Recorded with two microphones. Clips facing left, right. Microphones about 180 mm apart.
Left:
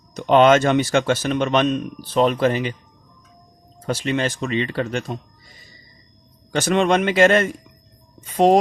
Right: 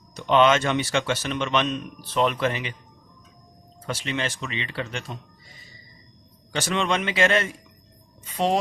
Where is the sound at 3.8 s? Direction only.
45° left (ahead or behind).